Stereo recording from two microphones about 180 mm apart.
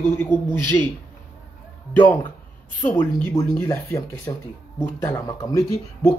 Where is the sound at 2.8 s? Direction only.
15° left (ahead or behind).